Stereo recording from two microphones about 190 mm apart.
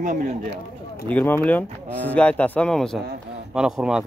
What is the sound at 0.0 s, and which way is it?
Speech, 40° right (ahead or behind).